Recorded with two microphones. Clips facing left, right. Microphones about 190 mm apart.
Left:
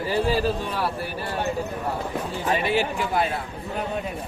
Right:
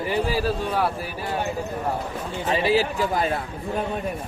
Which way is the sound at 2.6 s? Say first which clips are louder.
Right 3 dB; 35° right (ahead or behind).